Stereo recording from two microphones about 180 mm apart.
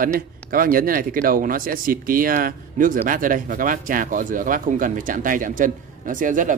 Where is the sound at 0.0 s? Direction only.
50° right (ahead or behind).